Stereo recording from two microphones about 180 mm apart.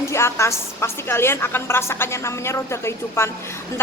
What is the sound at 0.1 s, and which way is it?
A woman's voice, 15° left (ahead or behind).